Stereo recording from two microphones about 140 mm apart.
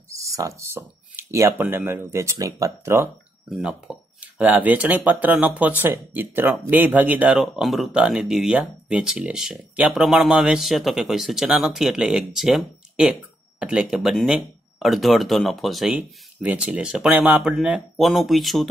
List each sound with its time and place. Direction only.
0.1 s speech: 20° right (ahead or behind)
3.4 s speech: 5° right (ahead or behind)